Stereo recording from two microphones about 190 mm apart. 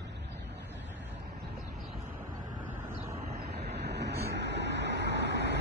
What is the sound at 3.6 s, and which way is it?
Vehicle, 60° right (ahead or behind).